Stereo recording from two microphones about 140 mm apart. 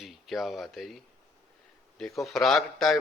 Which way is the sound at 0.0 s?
Centre (ahead or behind).